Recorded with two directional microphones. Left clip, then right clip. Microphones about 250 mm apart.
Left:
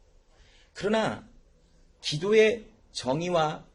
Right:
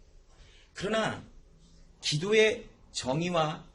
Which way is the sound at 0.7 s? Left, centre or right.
Centre.